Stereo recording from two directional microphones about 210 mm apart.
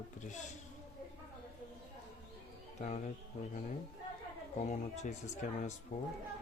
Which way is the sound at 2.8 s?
35° left (ahead or behind).